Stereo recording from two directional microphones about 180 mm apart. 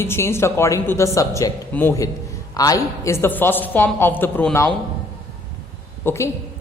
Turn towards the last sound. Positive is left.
turn(degrees=15)  # may be behind; listen again after turning